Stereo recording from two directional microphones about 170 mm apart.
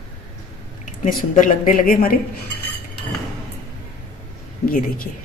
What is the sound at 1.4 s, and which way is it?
Speech, 60° left (ahead or behind).